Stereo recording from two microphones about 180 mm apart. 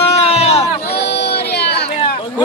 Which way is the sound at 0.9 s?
70° left (ahead or behind).